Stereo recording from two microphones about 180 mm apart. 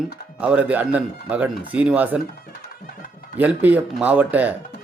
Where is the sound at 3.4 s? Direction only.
10° right (ahead or behind).